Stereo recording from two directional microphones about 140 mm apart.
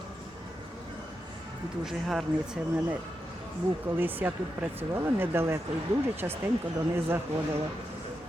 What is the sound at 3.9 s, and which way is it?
Speech, 15° right (ahead or behind).